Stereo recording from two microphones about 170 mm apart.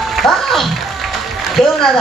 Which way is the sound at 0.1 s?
Centre (ahead or behind).